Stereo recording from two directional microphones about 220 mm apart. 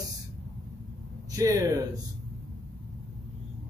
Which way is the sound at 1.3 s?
15° right (ahead or behind).